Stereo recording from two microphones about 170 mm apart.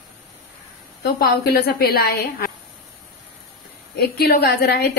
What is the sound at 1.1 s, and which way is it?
A woman's voice, 65° left (ahead or behind).